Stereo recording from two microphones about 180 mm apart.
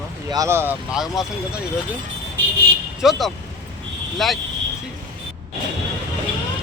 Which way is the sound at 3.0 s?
Centre (ahead or behind).